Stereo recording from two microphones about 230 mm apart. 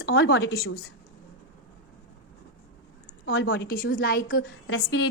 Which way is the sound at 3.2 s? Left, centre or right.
Left.